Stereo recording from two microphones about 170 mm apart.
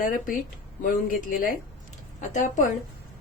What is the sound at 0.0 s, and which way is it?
A woman's voice, 50° left (ahead or behind).